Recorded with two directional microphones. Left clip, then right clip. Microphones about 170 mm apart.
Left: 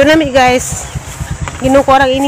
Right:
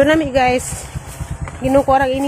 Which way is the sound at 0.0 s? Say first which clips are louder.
Left 6 dB; 25° left (ahead or behind).